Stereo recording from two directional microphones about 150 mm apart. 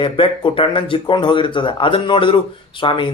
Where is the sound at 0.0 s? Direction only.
35° left (ahead or behind).